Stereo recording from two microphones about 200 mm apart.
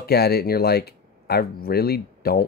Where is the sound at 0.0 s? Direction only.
55° left (ahead or behind).